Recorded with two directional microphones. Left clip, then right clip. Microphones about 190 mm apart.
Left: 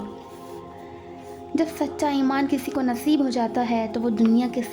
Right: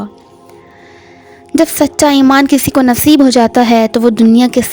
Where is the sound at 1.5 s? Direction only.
60° right (ahead or behind).